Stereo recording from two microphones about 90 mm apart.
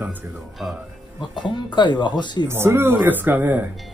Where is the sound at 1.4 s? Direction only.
60° left (ahead or behind).